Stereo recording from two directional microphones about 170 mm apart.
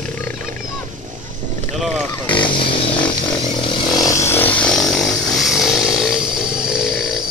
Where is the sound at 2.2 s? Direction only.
30° left (ahead or behind); by 6.3 s 5° right (ahead or behind).